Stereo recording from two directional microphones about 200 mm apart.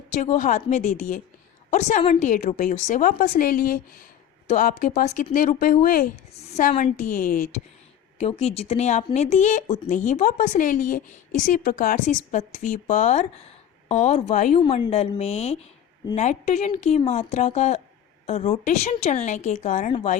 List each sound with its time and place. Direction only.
0.1 s a woman's voice: 40° left (ahead or behind)